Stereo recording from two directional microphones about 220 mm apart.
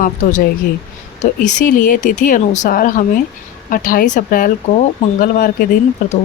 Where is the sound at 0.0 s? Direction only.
35° left (ahead or behind).